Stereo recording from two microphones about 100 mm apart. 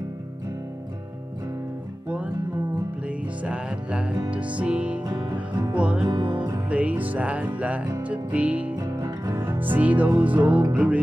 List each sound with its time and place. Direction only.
3.1 s music: 10° right (ahead or behind)
5.0 s music: 50° right (ahead or behind)
5.6 s music: 15° right (ahead or behind)
8.7 s music: 35° right (ahead or behind)
9.3 s music: 20° right (ahead or behind)